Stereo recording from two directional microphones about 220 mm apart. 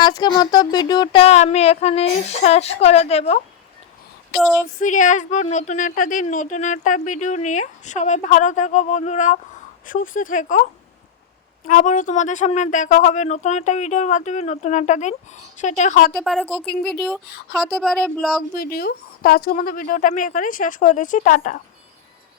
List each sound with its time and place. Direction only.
0.0 s speech: 20° left (ahead or behind)
4.4 s speech: 5° right (ahead or behind)
4.8 s a woman's voice: 35° left (ahead or behind)
16.1 s speech: centre (ahead or behind)
17.7 s speech: centre (ahead or behind)
18.5 s a woman's voice: 40° left (ahead or behind)